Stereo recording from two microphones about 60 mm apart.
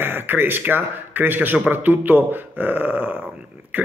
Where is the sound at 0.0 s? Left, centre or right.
Right.